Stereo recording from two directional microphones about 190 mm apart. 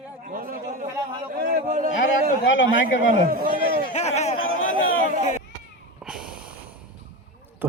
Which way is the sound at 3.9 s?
35° left (ahead or behind).